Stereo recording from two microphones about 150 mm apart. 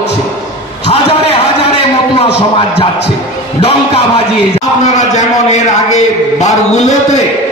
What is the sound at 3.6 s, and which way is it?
Speech, 40° left (ahead or behind).